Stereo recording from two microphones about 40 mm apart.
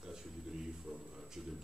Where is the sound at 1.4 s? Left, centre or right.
Centre.